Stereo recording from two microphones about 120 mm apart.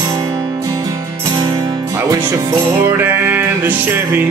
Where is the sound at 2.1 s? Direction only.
25° right (ahead or behind).